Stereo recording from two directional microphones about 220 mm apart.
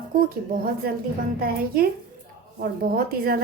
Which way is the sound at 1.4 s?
40° right (ahead or behind).